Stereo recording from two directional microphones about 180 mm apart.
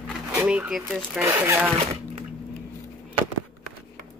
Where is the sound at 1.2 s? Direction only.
15° right (ahead or behind).